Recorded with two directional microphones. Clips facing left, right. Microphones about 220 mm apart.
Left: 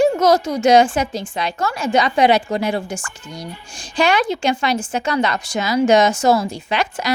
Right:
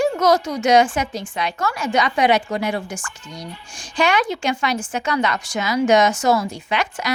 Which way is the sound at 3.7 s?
30° left (ahead or behind).